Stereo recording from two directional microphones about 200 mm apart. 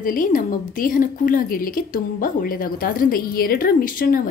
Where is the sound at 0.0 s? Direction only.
45° left (ahead or behind).